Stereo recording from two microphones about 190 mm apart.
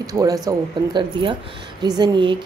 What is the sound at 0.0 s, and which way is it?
A woman's voice, 20° right (ahead or behind).